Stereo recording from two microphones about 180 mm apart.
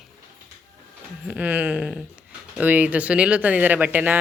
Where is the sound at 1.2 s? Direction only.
10° right (ahead or behind).